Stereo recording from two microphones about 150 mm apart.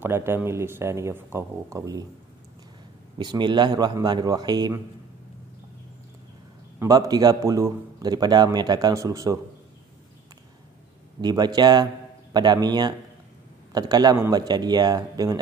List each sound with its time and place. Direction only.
0.0 s speech: 15° right (ahead or behind)
3.2 s a man's voice: 30° right (ahead or behind)
6.8 s a man's voice: 25° right (ahead or behind)
11.1 s a man's voice: 30° right (ahead or behind)